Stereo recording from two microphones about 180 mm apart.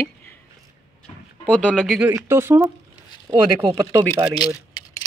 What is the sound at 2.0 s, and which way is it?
Speech, 15° right (ahead or behind).